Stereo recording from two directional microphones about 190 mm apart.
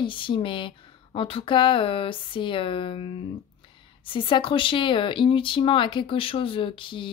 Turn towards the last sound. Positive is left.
turn(degrees=25)  # may be behind; listen again after turning